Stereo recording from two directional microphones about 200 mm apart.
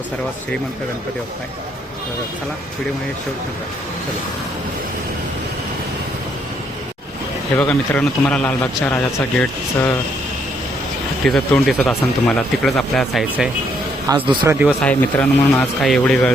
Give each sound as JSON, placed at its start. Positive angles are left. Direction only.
{"t": 7.5, "sound": "a man's voice", "side_deg": 10}
{"t": 11.2, "sound": "speech", "side_deg": 5}
{"t": 14.1, "sound": "a man's voice", "side_deg": -20}
{"t": 14.5, "sound": "speech", "side_deg": -5}
{"t": 14.8, "sound": "speech", "side_deg": 5}